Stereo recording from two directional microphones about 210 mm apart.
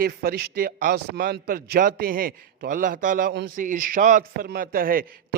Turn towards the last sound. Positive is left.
turn(degrees=-45)  # may be behind; listen again after turning